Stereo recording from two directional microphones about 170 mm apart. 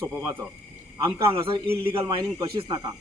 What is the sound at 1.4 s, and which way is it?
Speech, 15° right (ahead or behind).